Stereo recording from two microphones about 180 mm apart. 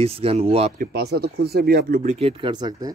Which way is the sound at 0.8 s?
60° right (ahead or behind).